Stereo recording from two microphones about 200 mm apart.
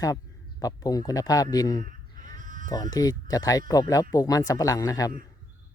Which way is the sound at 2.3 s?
40° right (ahead or behind).